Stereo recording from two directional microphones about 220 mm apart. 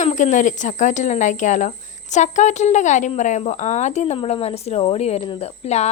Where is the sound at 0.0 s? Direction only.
35° left (ahead or behind).